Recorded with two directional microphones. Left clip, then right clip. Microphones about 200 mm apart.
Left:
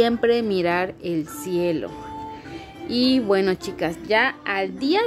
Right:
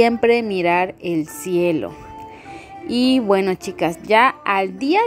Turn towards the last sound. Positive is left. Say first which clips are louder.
# right 6 dB
turn(degrees=-20)  # may be behind; listen again after turning